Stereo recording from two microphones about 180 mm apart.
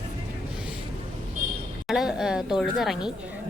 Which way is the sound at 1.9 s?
5° right (ahead or behind).